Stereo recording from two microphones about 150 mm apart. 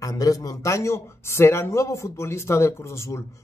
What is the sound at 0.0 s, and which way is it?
Speech, 25° left (ahead or behind).